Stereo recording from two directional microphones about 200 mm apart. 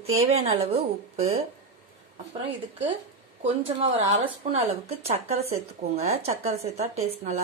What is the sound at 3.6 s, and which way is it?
Speech, 30° right (ahead or behind).